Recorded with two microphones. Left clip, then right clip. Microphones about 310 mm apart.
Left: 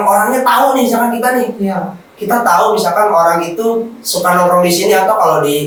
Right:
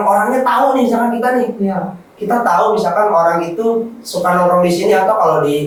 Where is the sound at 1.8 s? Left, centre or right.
Centre.